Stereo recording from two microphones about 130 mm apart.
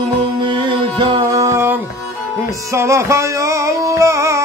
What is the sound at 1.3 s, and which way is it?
Music, 20° right (ahead or behind).